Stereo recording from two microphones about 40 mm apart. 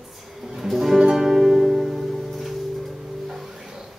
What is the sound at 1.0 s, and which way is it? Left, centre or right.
Music, centre.